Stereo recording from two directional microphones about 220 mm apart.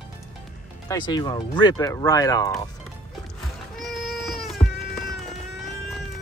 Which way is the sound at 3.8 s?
Centre (ahead or behind).